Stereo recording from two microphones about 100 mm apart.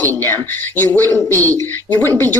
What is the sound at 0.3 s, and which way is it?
A woman's voice, 20° left (ahead or behind).